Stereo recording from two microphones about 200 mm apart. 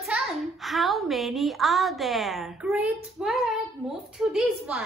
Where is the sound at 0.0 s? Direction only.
Centre (ahead or behind).